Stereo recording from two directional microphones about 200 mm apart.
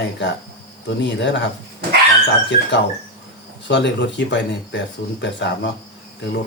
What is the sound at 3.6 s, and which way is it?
Speech, 60° left (ahead or behind).